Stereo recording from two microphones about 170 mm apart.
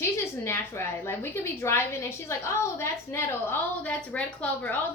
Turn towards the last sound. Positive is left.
turn(degrees=10)  # may be behind; listen again after turning